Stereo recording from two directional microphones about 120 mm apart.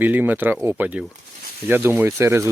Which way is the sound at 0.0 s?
15° right (ahead or behind).